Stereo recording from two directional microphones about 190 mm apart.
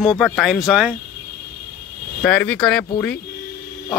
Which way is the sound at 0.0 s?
Centre (ahead or behind).